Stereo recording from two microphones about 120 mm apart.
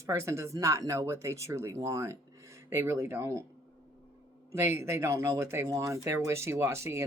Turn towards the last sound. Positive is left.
turn(degrees=-20)  # may be behind; listen again after turning